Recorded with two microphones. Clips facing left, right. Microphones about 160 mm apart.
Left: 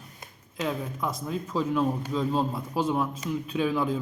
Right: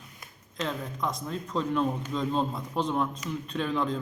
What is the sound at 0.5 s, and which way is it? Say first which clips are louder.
Speech: left 3 dB; 5° left (ahead or behind).